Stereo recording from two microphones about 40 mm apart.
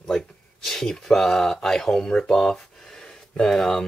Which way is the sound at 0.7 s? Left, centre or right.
Centre.